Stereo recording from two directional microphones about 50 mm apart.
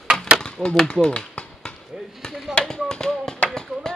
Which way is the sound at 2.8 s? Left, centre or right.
Centre.